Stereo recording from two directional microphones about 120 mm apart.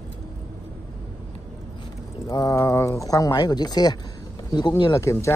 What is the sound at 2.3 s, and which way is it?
Speech, 30° left (ahead or behind).